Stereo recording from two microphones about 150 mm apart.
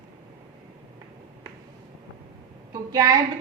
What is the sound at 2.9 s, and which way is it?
Speech, 25° right (ahead or behind).